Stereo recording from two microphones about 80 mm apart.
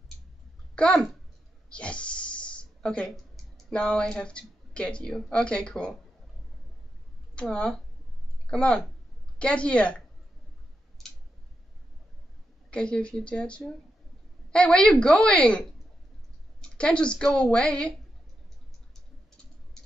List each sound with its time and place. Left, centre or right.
0.7 s a child's voice: centre
1.7 s snake: centre
3.7 s speech: centre
7.3 s speech: centre
12.7 s speech: centre
16.6 s speech: centre